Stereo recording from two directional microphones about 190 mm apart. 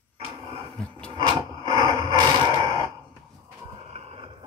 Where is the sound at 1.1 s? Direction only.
20° right (ahead or behind).